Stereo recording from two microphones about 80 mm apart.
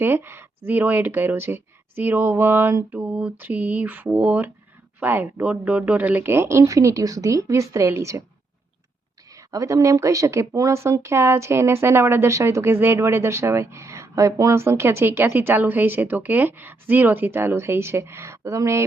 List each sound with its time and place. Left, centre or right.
0.0 s speech: right
9.3 s speech: right